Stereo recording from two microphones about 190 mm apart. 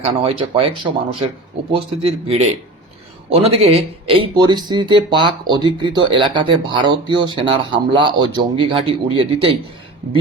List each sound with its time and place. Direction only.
0.0 s speech: 30° right (ahead or behind)